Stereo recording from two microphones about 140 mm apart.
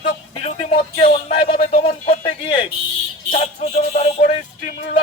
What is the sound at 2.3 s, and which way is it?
Speech, 35° left (ahead or behind).